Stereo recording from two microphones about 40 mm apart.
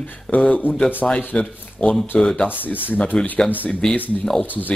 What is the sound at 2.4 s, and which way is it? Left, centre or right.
Speech, left.